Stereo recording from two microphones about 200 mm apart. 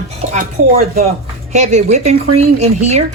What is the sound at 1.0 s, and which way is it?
Speech, 35° right (ahead or behind).